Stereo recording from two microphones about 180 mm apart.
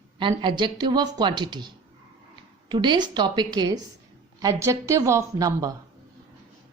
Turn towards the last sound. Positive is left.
turn(degrees=-20)  # may be behind; listen again after turning